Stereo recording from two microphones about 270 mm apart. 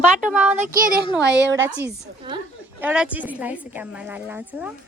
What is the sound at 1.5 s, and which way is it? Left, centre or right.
Speech, centre.